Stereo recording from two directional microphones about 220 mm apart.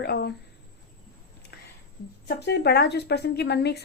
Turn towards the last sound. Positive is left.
turn(degrees=50)  # may be behind; listen again after turning